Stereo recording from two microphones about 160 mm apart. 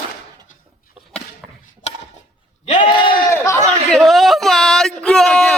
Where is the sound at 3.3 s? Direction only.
20° left (ahead or behind).